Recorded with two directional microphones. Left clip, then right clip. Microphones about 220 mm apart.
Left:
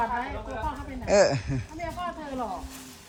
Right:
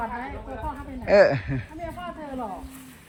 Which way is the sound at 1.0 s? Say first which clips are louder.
Right 4 dB; 15° left (ahead or behind).